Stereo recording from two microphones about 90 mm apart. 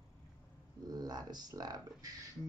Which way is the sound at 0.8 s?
45° right (ahead or behind).